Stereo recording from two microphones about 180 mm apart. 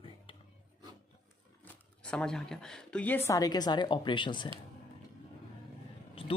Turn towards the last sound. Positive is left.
turn(degrees=30)  # may be behind; listen again after turning